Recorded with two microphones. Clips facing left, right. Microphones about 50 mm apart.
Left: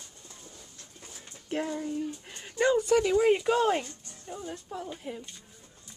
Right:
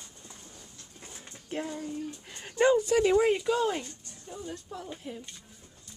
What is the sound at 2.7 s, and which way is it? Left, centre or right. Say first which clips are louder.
Speech: left 1 dB; centre.